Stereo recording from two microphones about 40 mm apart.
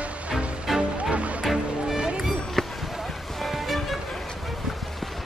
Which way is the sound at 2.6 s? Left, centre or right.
Centre.